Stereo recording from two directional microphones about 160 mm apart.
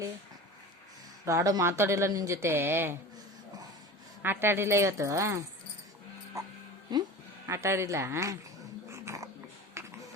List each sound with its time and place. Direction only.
1.2 s speech: 20° right (ahead or behind)
4.2 s speech: 15° right (ahead or behind)
6.3 s music: 20° right (ahead or behind)
7.4 s speech: 20° right (ahead or behind)
8.9 s dog: 20° right (ahead or behind)
9.8 s typing: 15° right (ahead or behind)